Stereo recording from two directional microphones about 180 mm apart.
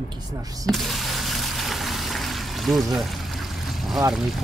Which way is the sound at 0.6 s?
Centre (ahead or behind).